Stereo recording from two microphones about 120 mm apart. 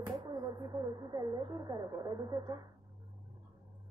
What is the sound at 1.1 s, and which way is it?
A woman's voice, 30° right (ahead or behind).